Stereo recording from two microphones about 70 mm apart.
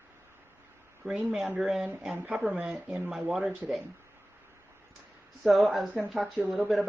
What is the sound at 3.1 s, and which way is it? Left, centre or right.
Speech, centre.